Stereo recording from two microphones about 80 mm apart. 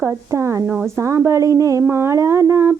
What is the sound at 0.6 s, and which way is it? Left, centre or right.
Speech, centre.